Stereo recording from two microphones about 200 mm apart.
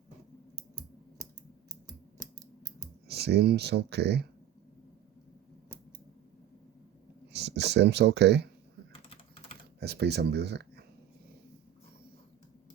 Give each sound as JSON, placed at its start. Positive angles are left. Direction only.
{"t": 3.1, "sound": "speech", "side_deg": -55}
{"t": 7.3, "sound": "a sound", "side_deg": -60}
{"t": 9.8, "sound": "speech", "side_deg": -55}